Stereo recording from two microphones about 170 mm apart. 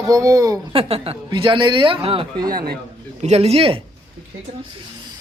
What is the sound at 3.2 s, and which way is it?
Speech, 40° right (ahead or behind).